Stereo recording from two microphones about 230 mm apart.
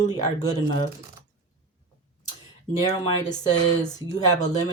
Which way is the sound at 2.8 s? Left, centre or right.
Centre.